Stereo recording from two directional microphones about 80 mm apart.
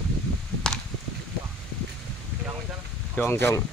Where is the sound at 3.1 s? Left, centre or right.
Left.